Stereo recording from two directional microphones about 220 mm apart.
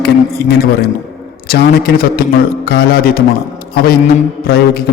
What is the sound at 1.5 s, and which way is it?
A man's voice, 45° left (ahead or behind).